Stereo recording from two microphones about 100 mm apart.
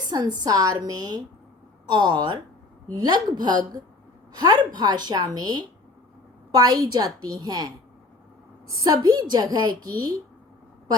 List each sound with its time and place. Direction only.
0.1 s a woman's voice: 45° right (ahead or behind)